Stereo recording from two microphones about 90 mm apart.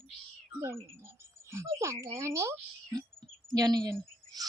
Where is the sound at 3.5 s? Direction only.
45° right (ahead or behind).